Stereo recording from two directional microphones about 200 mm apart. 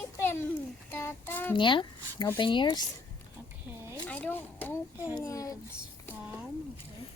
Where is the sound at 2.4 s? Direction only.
25° left (ahead or behind).